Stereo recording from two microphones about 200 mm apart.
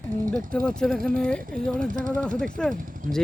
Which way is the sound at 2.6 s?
5° left (ahead or behind).